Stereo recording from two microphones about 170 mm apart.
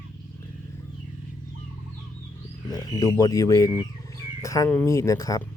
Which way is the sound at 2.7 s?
20° left (ahead or behind).